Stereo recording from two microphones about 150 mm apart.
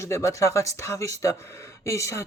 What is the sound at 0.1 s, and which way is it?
Speech, 20° left (ahead or behind).